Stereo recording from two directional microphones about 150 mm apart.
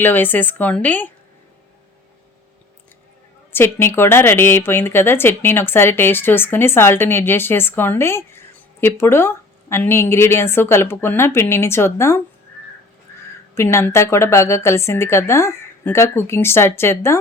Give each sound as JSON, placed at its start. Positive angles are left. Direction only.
{"t": 0.0, "sound": "speech", "side_deg": 15}
{"t": 3.5, "sound": "speech", "side_deg": 15}
{"t": 13.6, "sound": "speech", "side_deg": 15}